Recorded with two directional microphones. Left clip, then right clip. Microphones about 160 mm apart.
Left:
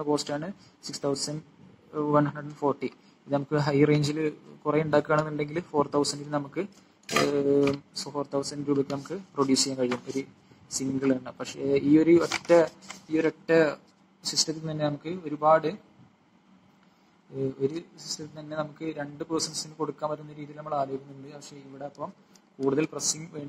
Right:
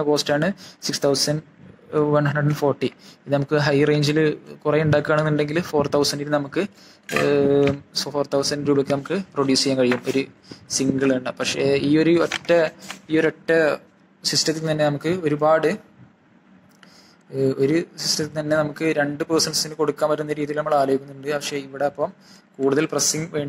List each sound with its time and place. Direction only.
0.0 s speech: 30° right (ahead or behind)
17.4 s speech: 50° right (ahead or behind)